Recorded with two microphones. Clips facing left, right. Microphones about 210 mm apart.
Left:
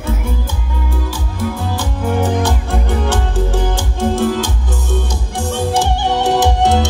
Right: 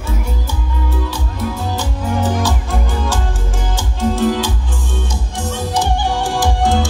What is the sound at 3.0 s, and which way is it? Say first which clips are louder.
Music: left 4 dB; 65° left (ahead or behind).